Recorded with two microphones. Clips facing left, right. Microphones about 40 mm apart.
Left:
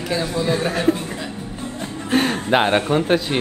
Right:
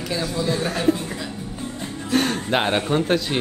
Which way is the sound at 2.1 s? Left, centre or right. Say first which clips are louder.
Left 3 dB; centre.